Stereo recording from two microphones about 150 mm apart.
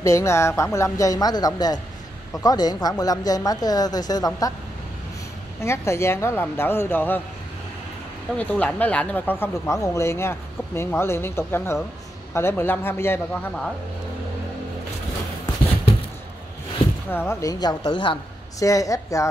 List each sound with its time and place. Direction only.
0.0 s a woman's voice: 20° left (ahead or behind)
5.6 s speech: 20° left (ahead or behind)
8.4 s speech: 10° left (ahead or behind)
17.1 s a woman's voice: 15° left (ahead or behind)